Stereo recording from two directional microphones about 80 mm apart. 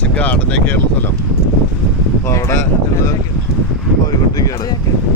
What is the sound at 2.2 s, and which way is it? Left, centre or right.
Speech, left.